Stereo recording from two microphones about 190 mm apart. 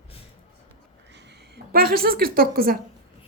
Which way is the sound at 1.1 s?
65° right (ahead or behind).